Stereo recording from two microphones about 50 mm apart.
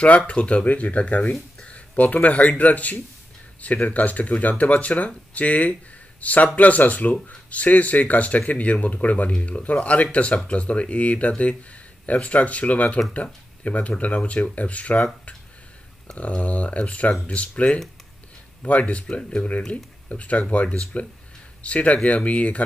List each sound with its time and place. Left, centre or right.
0.3 s speech: left
1.7 s a sound: left
2.2 s speech: left
16.2 s speech: left